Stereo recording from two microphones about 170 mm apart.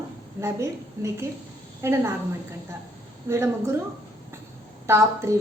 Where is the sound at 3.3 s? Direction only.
15° right (ahead or behind).